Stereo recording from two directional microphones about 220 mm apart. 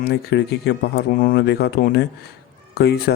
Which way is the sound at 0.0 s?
45° left (ahead or behind).